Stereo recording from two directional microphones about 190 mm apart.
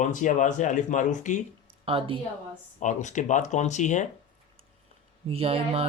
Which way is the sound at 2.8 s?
40° left (ahead or behind).